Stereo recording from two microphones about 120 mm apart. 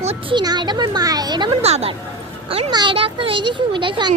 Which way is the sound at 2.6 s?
40° right (ahead or behind).